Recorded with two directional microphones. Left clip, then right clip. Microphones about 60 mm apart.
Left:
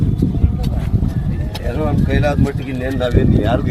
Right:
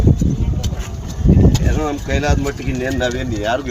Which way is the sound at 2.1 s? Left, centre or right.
Left.